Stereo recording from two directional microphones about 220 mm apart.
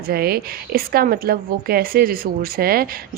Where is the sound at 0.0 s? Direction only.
45° right (ahead or behind).